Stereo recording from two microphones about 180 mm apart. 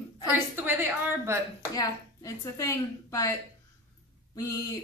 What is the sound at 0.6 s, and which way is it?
Speech, 10° right (ahead or behind).